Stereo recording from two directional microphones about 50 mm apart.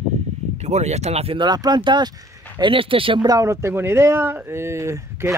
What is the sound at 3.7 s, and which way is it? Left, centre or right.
Speech, right.